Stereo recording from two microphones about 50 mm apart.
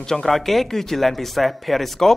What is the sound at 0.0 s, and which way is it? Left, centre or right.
A woman's voice, centre.